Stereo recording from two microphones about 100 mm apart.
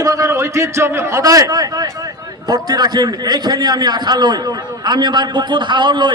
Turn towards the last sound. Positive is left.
turn(degrees=-50)  # may be behind; listen again after turning